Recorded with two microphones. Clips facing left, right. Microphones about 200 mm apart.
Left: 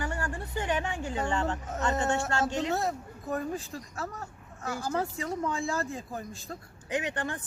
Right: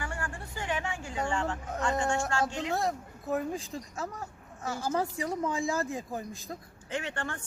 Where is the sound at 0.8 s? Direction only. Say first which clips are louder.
Left 3 dB; 35° left (ahead or behind).